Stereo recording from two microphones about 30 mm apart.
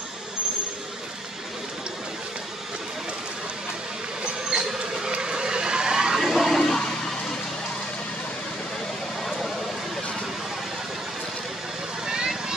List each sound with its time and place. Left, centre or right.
4.5 s vehicle: right
6.1 s a sound: centre
6.4 s toilet flush: centre
9.2 s vehicle: centre
12.1 s vehicle: right